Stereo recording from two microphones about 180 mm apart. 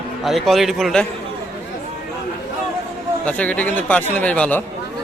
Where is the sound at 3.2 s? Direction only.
10° left (ahead or behind).